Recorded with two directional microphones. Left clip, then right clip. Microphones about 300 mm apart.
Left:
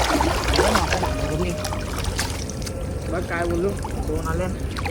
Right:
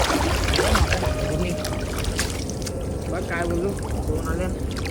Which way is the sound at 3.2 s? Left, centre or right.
Centre.